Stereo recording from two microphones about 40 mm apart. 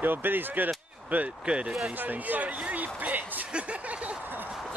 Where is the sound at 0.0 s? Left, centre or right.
Right.